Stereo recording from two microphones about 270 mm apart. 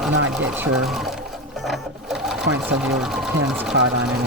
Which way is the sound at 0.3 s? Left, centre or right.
Centre.